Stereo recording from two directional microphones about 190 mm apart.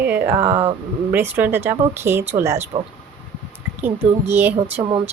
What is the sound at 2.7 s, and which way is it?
Speech, 30° right (ahead or behind).